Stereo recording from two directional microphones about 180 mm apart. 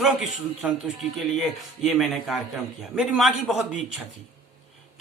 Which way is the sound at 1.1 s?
Centre (ahead or behind).